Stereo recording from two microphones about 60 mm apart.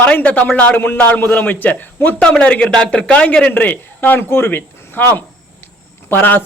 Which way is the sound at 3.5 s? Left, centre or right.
Left.